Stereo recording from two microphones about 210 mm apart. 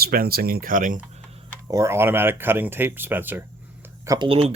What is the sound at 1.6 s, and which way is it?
Speech, 15° right (ahead or behind).